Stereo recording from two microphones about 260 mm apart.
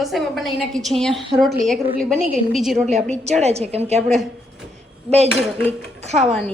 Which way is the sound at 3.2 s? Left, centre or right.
Right.